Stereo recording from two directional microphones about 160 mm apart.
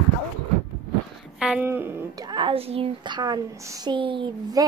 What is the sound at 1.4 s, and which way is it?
Speech, 5° right (ahead or behind).